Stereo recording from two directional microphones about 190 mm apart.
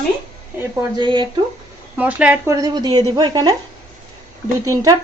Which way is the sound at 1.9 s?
10° right (ahead or behind).